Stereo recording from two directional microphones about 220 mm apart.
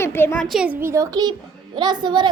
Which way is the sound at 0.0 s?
10° left (ahead or behind).